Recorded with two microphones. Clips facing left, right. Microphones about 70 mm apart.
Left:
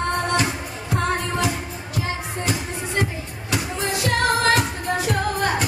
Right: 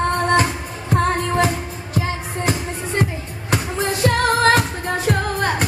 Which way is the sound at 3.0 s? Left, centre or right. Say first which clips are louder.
Right 2 dB; right.